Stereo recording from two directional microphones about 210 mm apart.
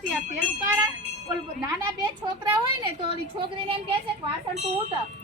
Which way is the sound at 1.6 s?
20° right (ahead or behind).